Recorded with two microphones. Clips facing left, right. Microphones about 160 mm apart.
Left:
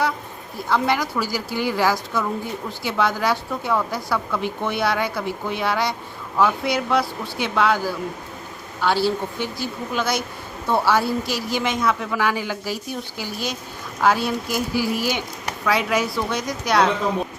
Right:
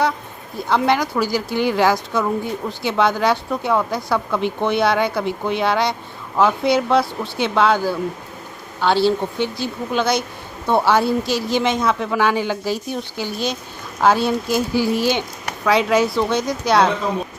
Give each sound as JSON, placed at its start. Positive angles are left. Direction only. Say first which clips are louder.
{"t": 0.7, "sound": "a woman's voice", "louder": "right 3 dB", "side_deg": -20}
{"t": 8.8, "sound": "a woman's voice", "louder": "right 4 dB", "side_deg": -25}